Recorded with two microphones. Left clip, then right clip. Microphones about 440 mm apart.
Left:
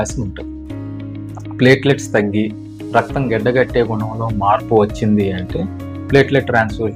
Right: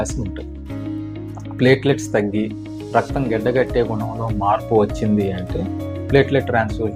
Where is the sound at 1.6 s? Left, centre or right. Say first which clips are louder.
Left 3 dB; right.